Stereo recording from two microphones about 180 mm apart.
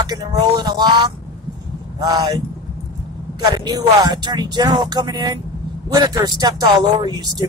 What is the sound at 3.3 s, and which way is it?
Speech, 20° right (ahead or behind).